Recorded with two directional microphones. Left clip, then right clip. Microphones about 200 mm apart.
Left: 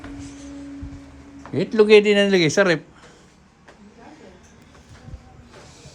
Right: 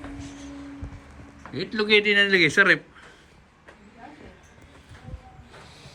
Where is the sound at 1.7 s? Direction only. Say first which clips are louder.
Left 6 dB; 40° left (ahead or behind).